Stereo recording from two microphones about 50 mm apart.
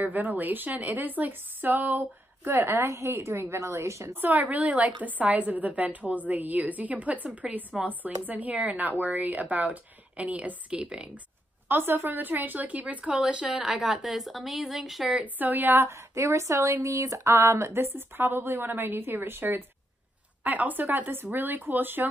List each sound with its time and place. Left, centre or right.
0.0 s a woman's voice: right
2.4 s a woman's voice: right
4.1 s a woman's voice: right
11.7 s a woman's voice: right; by 13.7 s centre
14.0 s speech: centre
15.3 s a woman's voice: right
15.9 s speech: right
17.7 s a woman's voice: right
20.4 s a woman's voice: right